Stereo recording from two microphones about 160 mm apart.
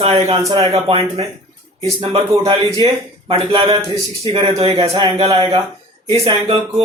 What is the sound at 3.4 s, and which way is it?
Speech, 35° right (ahead or behind).